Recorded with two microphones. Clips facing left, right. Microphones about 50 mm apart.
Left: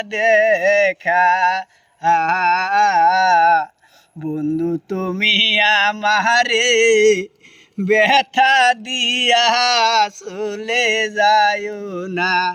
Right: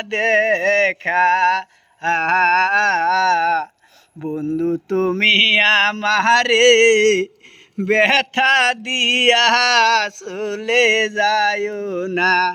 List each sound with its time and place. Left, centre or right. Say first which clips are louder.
0.0 s male singing: left 2 dB; right